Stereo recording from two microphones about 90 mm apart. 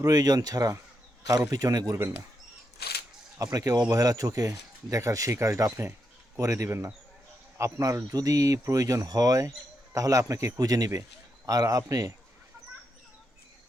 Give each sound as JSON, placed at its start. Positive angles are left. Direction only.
{"t": 0.0, "sound": "speech", "side_deg": -45}
{"t": 3.3, "sound": "speech", "side_deg": -35}